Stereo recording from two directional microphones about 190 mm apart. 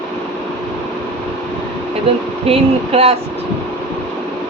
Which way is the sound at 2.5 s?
30° right (ahead or behind).